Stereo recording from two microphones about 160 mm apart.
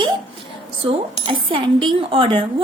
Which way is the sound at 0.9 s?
35° right (ahead or behind).